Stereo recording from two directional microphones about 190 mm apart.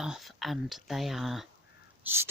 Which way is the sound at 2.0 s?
10° right (ahead or behind).